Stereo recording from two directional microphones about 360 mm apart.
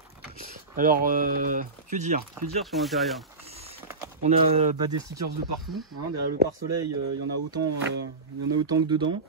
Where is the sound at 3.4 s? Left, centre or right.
Centre.